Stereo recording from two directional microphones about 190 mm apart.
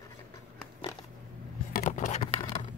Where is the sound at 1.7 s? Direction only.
45° left (ahead or behind).